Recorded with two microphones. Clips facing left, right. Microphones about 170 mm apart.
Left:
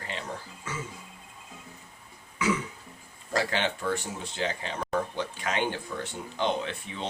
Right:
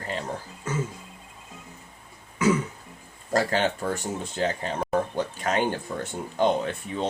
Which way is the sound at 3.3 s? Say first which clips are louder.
Right 5 dB; 45° right (ahead or behind).